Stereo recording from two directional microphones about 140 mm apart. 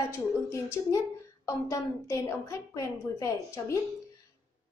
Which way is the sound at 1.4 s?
20° left (ahead or behind).